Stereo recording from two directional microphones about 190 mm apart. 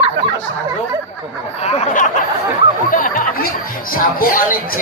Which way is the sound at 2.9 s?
45° left (ahead or behind).